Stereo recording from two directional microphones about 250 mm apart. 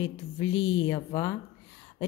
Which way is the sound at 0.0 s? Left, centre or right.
Centre.